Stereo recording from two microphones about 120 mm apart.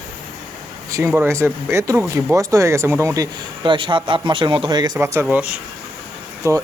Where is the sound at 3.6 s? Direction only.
45° right (ahead or behind).